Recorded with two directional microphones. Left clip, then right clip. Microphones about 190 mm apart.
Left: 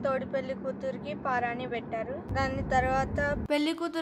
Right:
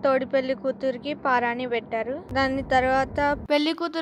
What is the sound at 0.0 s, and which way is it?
Speech, 45° right (ahead or behind).